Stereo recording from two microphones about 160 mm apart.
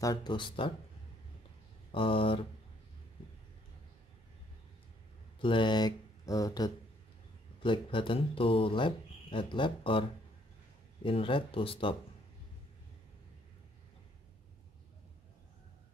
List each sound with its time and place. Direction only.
0.0 s speech: 25° left (ahead or behind)
1.9 s speech: 35° left (ahead or behind)
5.4 s speech: 30° left (ahead or behind)
11.1 s speech: 35° left (ahead or behind)